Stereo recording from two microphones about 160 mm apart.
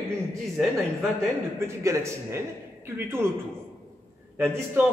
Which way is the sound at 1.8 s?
20° right (ahead or behind).